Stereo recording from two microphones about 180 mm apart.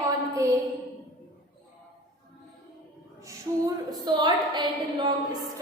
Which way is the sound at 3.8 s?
25° right (ahead or behind).